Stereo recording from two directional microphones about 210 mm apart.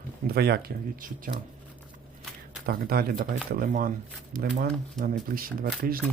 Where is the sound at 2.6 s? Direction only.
45° right (ahead or behind).